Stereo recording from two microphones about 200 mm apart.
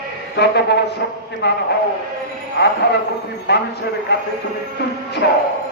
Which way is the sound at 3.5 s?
60° left (ahead or behind).